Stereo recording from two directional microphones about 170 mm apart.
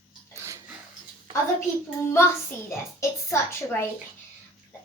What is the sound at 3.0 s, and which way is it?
Speech, 15° left (ahead or behind).